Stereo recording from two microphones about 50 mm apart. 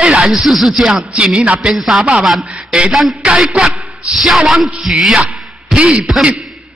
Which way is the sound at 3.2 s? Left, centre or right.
Centre.